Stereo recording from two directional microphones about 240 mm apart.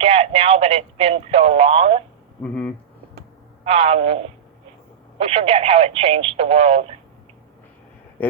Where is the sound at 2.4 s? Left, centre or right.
Centre.